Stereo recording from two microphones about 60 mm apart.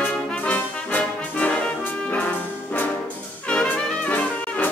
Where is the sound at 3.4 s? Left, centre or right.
Centre.